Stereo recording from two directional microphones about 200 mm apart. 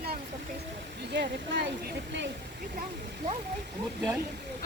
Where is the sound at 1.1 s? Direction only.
60° right (ahead or behind).